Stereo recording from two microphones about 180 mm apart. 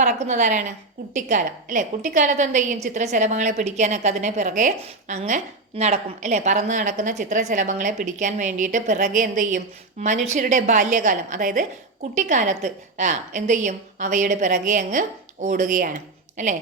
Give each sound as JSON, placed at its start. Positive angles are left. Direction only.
{"t": 0.0, "sound": "a woman's voice", "side_deg": -40}